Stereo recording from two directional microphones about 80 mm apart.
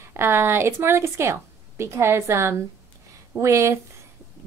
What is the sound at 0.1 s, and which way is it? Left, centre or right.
A woman's voice, right.